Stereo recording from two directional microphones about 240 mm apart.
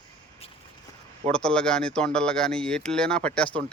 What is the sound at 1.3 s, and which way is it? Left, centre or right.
Speech, centre.